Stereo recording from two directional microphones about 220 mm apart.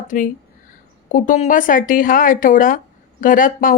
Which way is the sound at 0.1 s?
40° left (ahead or behind).